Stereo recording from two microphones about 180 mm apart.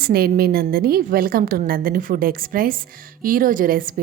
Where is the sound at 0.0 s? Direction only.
60° right (ahead or behind).